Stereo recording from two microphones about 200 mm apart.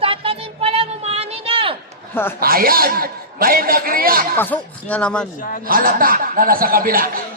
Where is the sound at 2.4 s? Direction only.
45° right (ahead or behind).